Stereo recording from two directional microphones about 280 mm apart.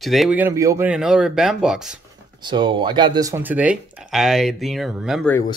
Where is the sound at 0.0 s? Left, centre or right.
Centre.